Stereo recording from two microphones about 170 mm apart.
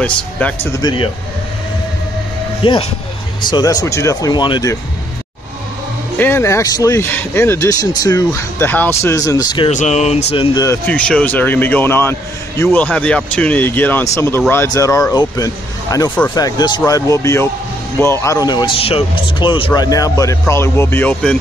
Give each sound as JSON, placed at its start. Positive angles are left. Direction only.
{"t": 0.0, "sound": "speech", "side_deg": 10}
{"t": 0.7, "sound": "speech", "side_deg": 25}
{"t": 2.6, "sound": "a sound", "side_deg": 30}
{"t": 3.4, "sound": "speech", "side_deg": 25}
{"t": 6.1, "sound": "speech", "side_deg": 15}
{"t": 9.7, "sound": "a sound", "side_deg": 45}
{"t": 10.3, "sound": "speech", "side_deg": 30}
{"t": 10.9, "sound": "speech", "side_deg": 5}